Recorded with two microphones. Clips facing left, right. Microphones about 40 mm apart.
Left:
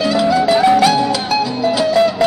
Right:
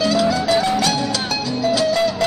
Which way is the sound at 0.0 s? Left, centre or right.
Centre.